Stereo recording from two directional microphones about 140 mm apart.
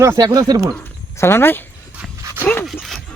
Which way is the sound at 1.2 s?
15° left (ahead or behind).